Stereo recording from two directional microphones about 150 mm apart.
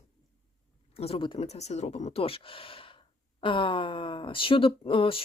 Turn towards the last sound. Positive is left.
turn(degrees=35)  # may be behind; listen again after turning